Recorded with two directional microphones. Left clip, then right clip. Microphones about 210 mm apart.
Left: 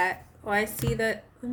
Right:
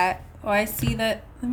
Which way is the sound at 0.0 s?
30° right (ahead or behind).